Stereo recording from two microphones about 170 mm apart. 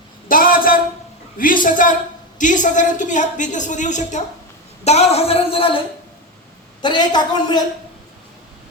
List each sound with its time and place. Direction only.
0.3 s a sound: 55° left (ahead or behind)
1.4 s speech: 55° left (ahead or behind); by 5.8 s 35° left (ahead or behind)
6.8 s speech: 25° left (ahead or behind)